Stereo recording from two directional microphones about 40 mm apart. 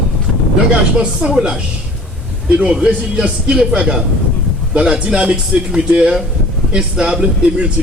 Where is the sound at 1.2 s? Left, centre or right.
Right.